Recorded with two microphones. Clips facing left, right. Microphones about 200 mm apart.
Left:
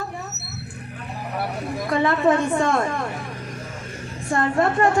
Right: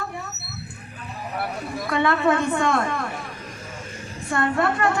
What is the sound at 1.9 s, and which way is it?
Speech, 35° left (ahead or behind).